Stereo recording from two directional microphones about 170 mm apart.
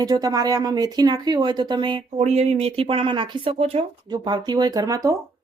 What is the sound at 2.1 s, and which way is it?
Speech, 40° right (ahead or behind).